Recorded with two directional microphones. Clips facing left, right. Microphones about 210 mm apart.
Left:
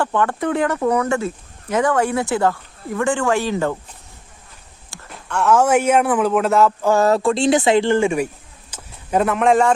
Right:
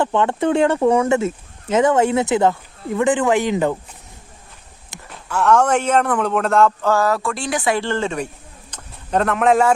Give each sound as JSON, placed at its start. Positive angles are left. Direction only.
{"t": 0.0, "sound": "speech", "side_deg": -20}
{"t": 5.0, "sound": "a man's voice", "side_deg": 0}
{"t": 6.9, "sound": "speech", "side_deg": 25}
{"t": 8.7, "sound": "a sound", "side_deg": 5}